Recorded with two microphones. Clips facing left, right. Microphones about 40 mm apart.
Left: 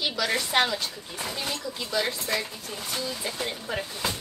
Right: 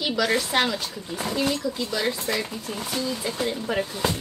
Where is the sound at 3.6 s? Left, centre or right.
Right.